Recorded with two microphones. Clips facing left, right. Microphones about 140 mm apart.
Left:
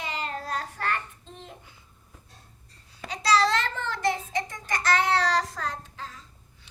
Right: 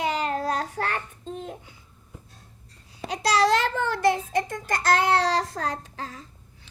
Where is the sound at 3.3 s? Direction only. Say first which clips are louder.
Right 2 dB; 55° right (ahead or behind).